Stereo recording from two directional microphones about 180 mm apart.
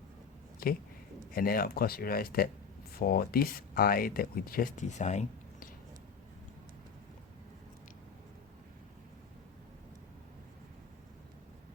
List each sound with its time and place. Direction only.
0.6 s speech: 55° left (ahead or behind); by 5.6 s 40° left (ahead or behind)